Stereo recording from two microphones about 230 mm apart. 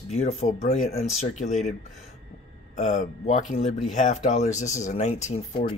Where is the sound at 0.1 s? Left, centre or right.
Left.